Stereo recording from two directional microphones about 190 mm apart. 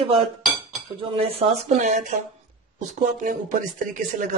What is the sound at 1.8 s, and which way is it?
Speech, 40° right (ahead or behind).